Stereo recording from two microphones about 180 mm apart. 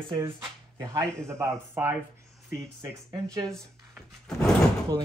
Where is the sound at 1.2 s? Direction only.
15° right (ahead or behind).